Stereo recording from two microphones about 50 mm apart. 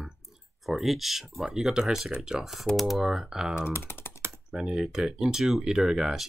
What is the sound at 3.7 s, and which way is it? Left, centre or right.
Speech, left.